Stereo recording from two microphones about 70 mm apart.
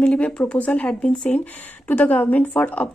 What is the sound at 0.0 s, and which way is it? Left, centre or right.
Speech, centre.